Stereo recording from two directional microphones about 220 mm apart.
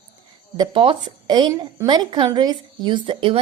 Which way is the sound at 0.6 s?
25° right (ahead or behind).